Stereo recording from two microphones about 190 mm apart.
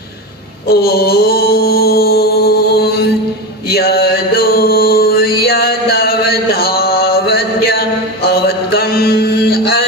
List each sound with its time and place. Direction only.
0.7 s mantra: 55° left (ahead or behind)